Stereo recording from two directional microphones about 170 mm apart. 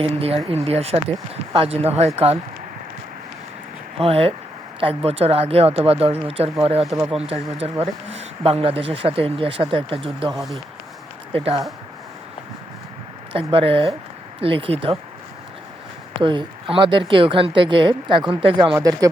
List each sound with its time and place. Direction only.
0.0 s speech: 35° right (ahead or behind)
4.0 s speech: 35° right (ahead or behind)
13.3 s speech: 35° right (ahead or behind)
16.2 s a woman's voice: 30° right (ahead or behind)